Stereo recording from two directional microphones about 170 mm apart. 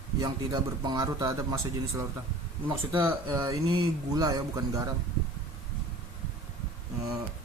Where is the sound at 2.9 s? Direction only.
10° right (ahead or behind).